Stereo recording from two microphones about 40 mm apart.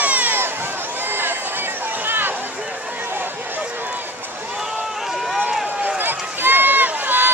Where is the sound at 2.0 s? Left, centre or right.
Right.